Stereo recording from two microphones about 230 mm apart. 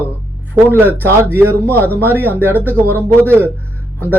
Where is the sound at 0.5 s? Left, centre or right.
Centre.